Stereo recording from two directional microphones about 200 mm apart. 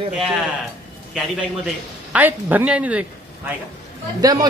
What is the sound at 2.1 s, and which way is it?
A man's voice, 10° right (ahead or behind).